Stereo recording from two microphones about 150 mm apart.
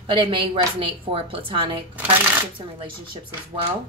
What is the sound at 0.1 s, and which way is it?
A woman's voice, 35° right (ahead or behind).